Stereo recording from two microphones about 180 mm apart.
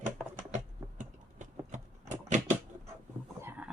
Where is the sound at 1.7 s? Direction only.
45° right (ahead or behind).